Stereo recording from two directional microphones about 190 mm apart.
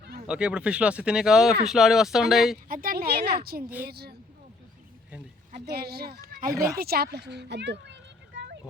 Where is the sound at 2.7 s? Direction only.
50° right (ahead or behind).